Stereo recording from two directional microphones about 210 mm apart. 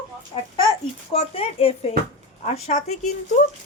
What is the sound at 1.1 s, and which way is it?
A woman's voice, 25° left (ahead or behind).